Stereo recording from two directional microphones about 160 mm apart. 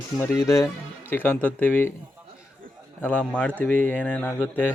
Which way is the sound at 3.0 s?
10° left (ahead or behind).